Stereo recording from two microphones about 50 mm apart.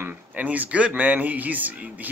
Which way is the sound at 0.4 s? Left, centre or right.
Right.